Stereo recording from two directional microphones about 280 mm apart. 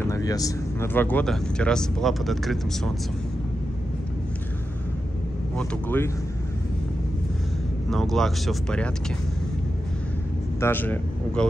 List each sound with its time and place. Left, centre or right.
0.0 s speech: centre
5.6 s speech: centre
7.9 s speech: centre
10.6 s a man's voice: centre